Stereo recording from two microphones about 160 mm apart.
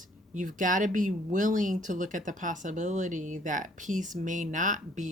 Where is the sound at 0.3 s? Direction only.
55° right (ahead or behind).